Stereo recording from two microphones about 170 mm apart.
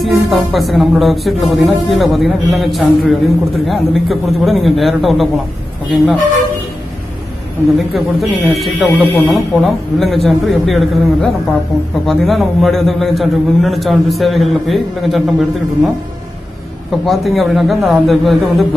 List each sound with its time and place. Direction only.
0.0 s a man's voice: centre (ahead or behind)
7.7 s a man's voice: centre (ahead or behind)
16.9 s a man's voice: centre (ahead or behind)